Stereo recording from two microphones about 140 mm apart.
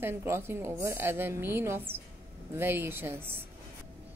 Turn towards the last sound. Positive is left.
turn(degrees=-15)  # may be behind; listen again after turning